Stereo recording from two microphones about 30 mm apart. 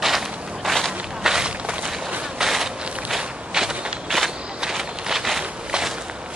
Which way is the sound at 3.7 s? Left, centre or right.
Right.